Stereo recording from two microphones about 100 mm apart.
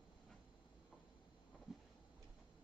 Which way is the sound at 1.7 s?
Centre (ahead or behind).